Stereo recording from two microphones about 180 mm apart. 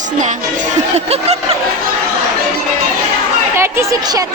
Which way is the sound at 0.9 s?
35° right (ahead or behind).